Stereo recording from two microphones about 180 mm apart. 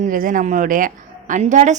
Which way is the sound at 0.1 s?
50° right (ahead or behind).